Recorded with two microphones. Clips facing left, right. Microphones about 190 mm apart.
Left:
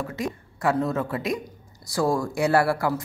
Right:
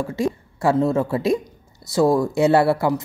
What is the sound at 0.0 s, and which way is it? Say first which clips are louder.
A woman's voice: right 7 dB; 30° right (ahead or behind).